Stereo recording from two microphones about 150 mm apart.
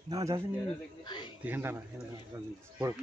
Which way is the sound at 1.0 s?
30° left (ahead or behind).